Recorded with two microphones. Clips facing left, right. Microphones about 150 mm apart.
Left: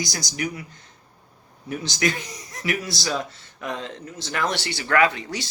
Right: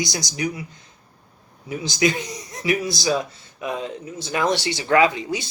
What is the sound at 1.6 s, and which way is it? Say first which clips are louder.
Speech: right 4 dB; 15° right (ahead or behind).